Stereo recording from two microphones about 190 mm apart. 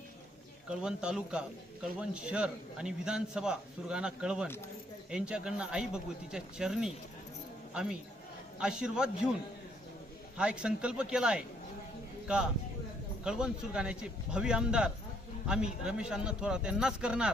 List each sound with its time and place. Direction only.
0.7 s a man's voice: 5° right (ahead or behind)
10.3 s a man's voice: 5° right (ahead or behind)